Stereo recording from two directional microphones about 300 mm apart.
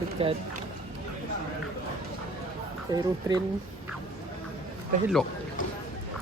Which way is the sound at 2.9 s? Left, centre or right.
Centre.